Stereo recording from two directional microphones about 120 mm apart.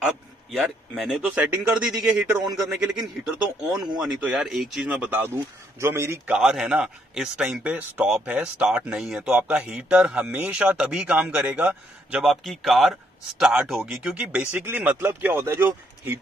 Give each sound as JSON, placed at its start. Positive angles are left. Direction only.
{"t": 0.0, "sound": "a man's voice", "side_deg": 0}
{"t": 6.3, "sound": "a man's voice", "side_deg": -5}
{"t": 12.2, "sound": "a man's voice", "side_deg": 0}